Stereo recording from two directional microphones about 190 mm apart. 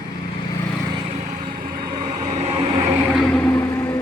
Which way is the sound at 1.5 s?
45° right (ahead or behind).